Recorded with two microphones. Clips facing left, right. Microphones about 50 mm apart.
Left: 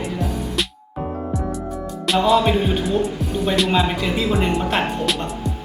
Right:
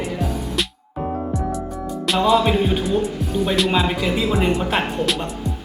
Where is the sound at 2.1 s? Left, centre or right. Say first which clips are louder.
Even; centre.